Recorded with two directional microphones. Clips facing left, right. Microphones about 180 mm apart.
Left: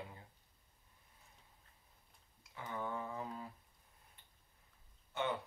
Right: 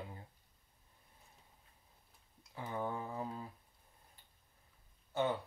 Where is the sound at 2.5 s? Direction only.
30° right (ahead or behind).